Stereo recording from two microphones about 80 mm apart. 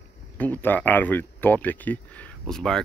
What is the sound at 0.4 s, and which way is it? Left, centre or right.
Speech, left.